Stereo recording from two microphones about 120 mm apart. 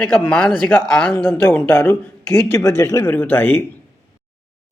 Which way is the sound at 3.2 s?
15° left (ahead or behind).